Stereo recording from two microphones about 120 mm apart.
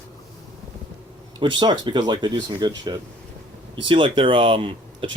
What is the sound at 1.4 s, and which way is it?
Speech, 40° right (ahead or behind).